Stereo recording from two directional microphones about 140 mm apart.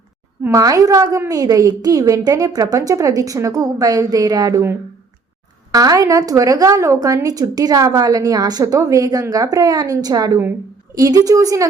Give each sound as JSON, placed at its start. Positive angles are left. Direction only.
{"t": 0.4, "sound": "a woman's voice", "side_deg": -25}
{"t": 5.7, "sound": "a woman's voice", "side_deg": -25}